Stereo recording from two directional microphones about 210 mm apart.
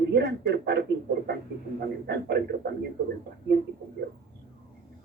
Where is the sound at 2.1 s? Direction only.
50° right (ahead or behind).